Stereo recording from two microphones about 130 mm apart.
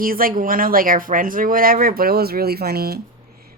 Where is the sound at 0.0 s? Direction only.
90° right.